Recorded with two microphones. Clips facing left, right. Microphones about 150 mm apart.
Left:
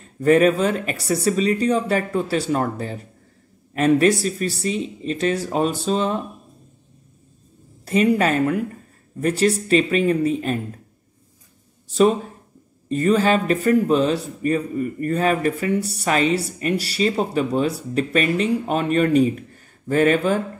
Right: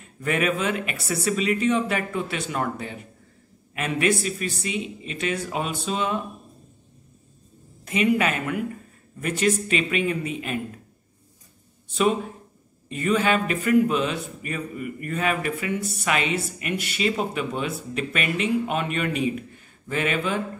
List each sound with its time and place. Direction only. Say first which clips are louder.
0.0 s speech: left 10 dB; 35° left (ahead or behind)
7.8 s speech: left 4 dB; 35° left (ahead or behind)
11.9 s speech: left 5 dB; 40° left (ahead or behind)